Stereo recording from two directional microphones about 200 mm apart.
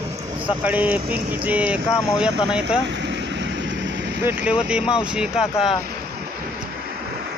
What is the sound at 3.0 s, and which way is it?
Vehicle, 60° right (ahead or behind).